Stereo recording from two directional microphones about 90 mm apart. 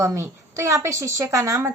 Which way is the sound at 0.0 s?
35° right (ahead or behind).